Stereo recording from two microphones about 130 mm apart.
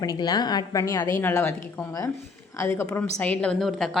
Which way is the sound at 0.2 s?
35° left (ahead or behind).